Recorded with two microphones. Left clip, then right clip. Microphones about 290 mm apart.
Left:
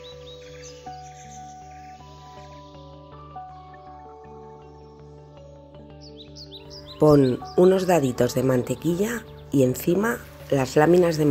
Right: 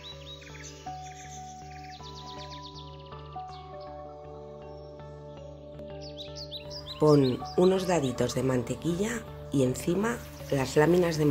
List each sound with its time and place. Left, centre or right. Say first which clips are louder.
6.5 s music: right 1 dB; centre
7.0 s speech: left 6 dB; centre